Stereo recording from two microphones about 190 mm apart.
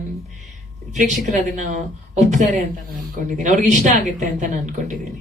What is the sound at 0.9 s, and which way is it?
A woman's voice, 40° right (ahead or behind).